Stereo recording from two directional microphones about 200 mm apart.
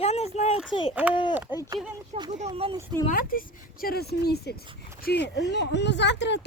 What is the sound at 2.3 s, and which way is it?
Speech, 35° right (ahead or behind).